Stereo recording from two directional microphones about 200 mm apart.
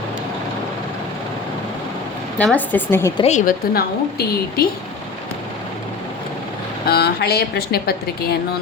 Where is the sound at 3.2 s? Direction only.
35° left (ahead or behind).